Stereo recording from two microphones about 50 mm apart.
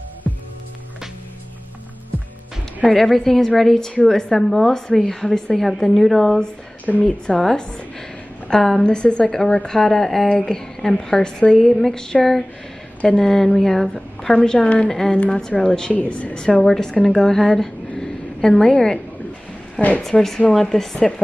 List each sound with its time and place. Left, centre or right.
2.9 s a woman's voice: centre
6.9 s speech: left
7.2 s a woman's voice: centre
8.8 s a woman's voice: centre
11.6 s a woman's voice: centre
15.1 s speech: left
16.6 s a woman's voice: centre
20.0 s a woman's voice: centre